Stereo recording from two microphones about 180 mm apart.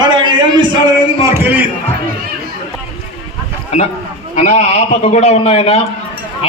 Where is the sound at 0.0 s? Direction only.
25° right (ahead or behind).